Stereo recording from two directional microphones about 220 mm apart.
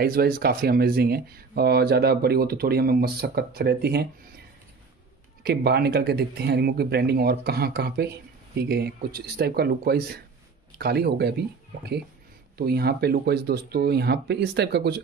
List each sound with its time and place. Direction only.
0.0 s speech: 45° right (ahead or behind)
5.4 s speech: 45° right (ahead or behind)
12.5 s speech: 45° right (ahead or behind)